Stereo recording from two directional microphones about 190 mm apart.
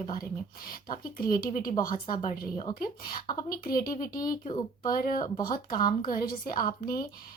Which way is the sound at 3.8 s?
20° left (ahead or behind).